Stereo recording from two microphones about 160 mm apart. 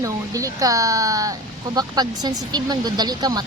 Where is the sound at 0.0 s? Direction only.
20° right (ahead or behind).